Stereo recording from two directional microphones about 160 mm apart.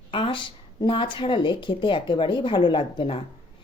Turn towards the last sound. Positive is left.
turn(degrees=30)  # may be behind; listen again after turning